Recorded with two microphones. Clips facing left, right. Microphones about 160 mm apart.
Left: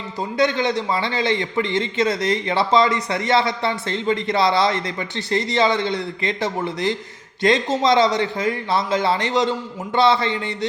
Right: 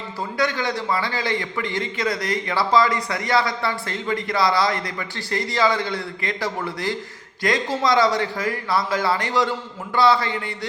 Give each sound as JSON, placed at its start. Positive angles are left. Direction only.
{"t": 0.2, "sound": "a man's voice", "side_deg": 20}